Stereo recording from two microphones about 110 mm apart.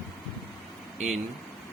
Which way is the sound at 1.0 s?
90° right.